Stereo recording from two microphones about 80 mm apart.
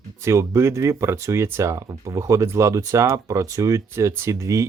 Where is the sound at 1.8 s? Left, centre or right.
Right.